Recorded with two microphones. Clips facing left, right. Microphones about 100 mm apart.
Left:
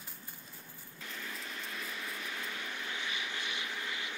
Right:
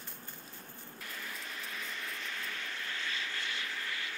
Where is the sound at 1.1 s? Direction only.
Centre (ahead or behind); by 4.2 s 20° left (ahead or behind).